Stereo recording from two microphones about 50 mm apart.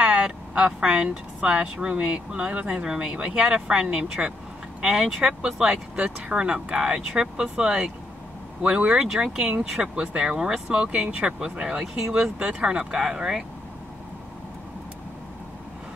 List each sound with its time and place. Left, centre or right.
0.0 s a woman's voice: centre
5.9 s speech: right
10.9 s speech: right; by 13.4 s centre